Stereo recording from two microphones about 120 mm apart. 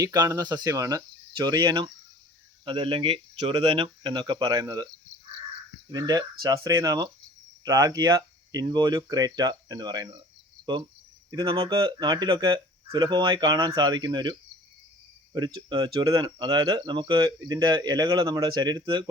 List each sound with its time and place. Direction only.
0.0 s speech: 30° right (ahead or behind); by 3.5 s 50° right (ahead or behind)
3.7 s speech: 40° right (ahead or behind)
5.9 s speech: 35° right (ahead or behind)
11.3 s speech: 45° right (ahead or behind)